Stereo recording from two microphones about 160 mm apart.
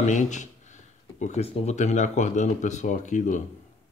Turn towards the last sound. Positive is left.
turn(degrees=50)  # may be behind; listen again after turning